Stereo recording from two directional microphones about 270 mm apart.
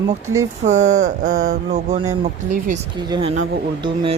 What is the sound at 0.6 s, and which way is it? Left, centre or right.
Speech, right.